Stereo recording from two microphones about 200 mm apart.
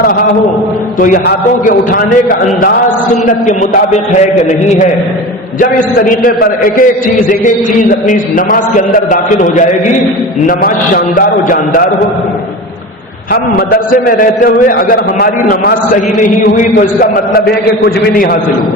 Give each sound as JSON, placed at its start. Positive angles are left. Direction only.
{"t": 0.9, "sound": "a man's voice", "side_deg": 40}
{"t": 5.5, "sound": "a man's voice", "side_deg": 45}
{"t": 13.3, "sound": "a man's voice", "side_deg": 50}